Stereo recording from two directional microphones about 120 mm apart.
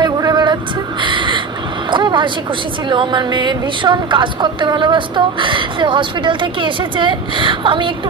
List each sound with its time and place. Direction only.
0.0 s vehicle: 35° right (ahead or behind)
1.0 s a sound: 40° right (ahead or behind)
1.9 s vehicle: 40° right (ahead or behind)
2.9 s speech: 40° right (ahead or behind)